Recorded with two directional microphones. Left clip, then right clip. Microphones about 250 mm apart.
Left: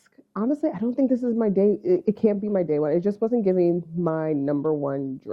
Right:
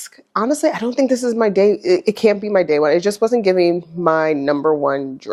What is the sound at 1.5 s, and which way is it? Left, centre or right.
Speech, centre.